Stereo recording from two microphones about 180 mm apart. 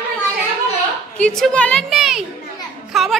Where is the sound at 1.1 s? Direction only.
5° left (ahead or behind).